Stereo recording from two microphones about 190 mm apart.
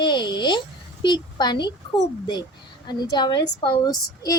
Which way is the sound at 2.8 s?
20° left (ahead or behind).